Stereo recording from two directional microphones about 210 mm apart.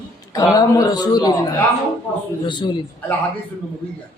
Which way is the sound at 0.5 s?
15° left (ahead or behind).